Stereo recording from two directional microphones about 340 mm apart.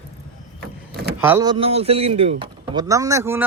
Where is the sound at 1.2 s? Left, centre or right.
Centre.